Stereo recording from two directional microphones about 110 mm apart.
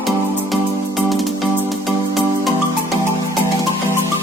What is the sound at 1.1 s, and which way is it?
Music, centre (ahead or behind).